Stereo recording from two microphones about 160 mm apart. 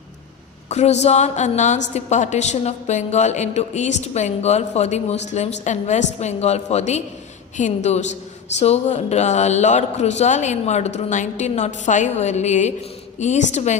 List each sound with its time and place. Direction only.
0.7 s a woman's voice: 45° left (ahead or behind)